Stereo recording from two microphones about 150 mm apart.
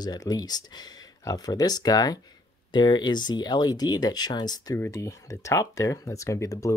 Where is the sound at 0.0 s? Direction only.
25° left (ahead or behind).